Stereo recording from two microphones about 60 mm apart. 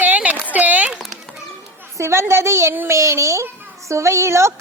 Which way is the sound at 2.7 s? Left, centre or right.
Right.